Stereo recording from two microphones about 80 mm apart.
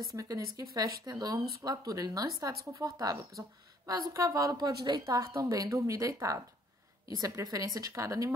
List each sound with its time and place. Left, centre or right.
0.1 s speech: right
5.0 s speech: right